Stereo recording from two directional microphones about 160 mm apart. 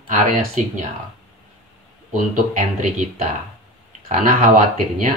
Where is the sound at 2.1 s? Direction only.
50° right (ahead or behind).